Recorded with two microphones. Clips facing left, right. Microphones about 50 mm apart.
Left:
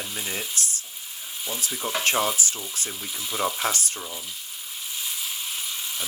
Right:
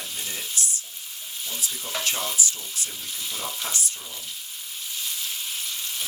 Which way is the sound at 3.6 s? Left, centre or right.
Left.